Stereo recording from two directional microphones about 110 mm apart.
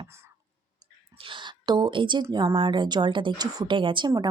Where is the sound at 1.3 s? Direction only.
45° right (ahead or behind).